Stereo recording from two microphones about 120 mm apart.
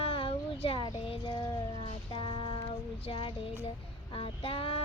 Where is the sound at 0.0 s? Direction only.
50° left (ahead or behind).